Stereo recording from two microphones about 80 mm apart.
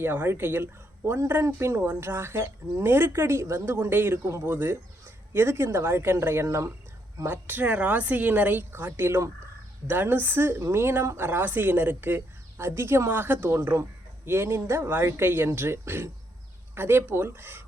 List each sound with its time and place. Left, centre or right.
0.0 s a woman's voice: right
7.3 s a woman's voice: right